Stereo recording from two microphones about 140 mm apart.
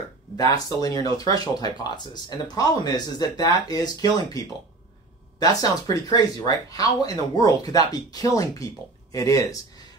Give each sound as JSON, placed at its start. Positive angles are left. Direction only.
{"t": 0.4, "sound": "speech", "side_deg": 25}
{"t": 5.4, "sound": "speech", "side_deg": 25}